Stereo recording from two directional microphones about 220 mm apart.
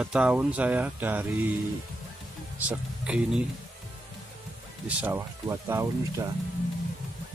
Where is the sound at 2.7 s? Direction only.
5° right (ahead or behind).